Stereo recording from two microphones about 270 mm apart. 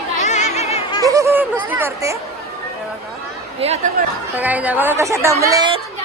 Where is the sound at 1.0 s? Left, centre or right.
Centre.